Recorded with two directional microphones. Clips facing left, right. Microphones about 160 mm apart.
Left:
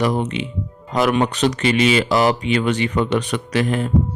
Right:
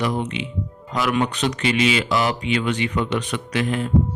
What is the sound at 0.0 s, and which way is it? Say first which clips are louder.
Speech: left 4 dB; 45° left (ahead or behind).